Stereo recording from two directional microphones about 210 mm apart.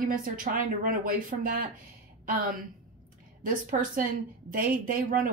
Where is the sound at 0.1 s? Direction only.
40° right (ahead or behind).